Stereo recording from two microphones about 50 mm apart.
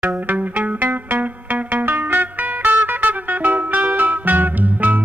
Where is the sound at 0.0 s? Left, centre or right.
Right.